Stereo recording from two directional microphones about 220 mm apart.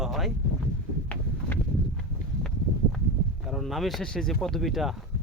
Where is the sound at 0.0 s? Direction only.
Centre (ahead or behind).